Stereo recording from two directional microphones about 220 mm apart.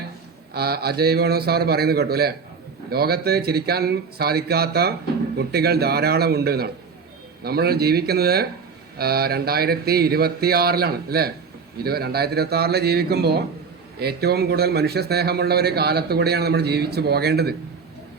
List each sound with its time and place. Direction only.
0.5 s speech: 45° right (ahead or behind)